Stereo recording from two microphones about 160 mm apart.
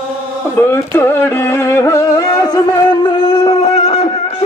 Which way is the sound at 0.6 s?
15° left (ahead or behind).